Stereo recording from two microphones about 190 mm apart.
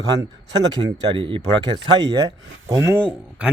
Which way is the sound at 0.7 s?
30° right (ahead or behind).